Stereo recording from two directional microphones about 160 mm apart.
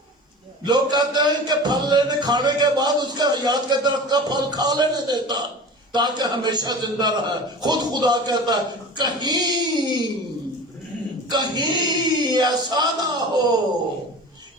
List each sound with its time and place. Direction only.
0.6 s speech: 25° right (ahead or behind)
11.3 s a sound: 25° right (ahead or behind)
12.7 s speech: 25° right (ahead or behind)